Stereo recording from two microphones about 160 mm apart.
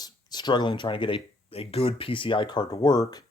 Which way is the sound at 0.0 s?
25° left (ahead or behind).